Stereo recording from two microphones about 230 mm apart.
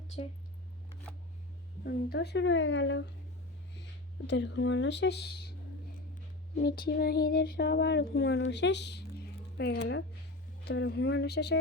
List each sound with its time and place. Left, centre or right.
1.8 s child singing: left
4.3 s child singing: left
6.6 s child singing: left